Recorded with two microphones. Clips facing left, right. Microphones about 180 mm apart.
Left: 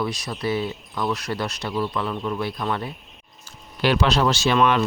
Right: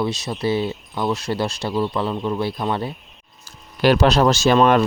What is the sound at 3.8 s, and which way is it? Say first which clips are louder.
Speech: right 5 dB; 40° right (ahead or behind).